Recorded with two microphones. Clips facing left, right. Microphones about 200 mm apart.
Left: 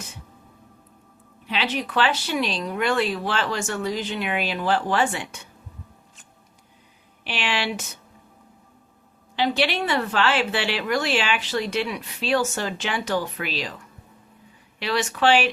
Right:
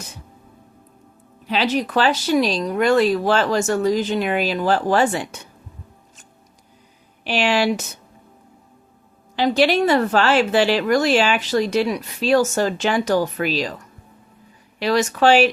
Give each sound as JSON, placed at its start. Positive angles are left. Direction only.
{"t": 1.5, "sound": "a woman's voice", "side_deg": -40}
{"t": 7.3, "sound": "a woman's voice", "side_deg": -40}
{"t": 9.3, "sound": "a woman's voice", "side_deg": -40}